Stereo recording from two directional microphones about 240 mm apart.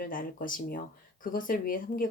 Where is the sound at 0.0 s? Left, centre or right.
Left.